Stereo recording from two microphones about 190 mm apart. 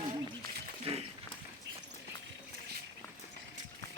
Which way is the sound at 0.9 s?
30° right (ahead or behind).